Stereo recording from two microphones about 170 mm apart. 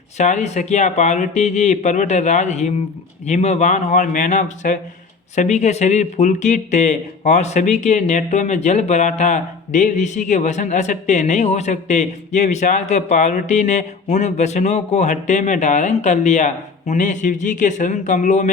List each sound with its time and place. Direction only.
0.2 s speech: 40° left (ahead or behind)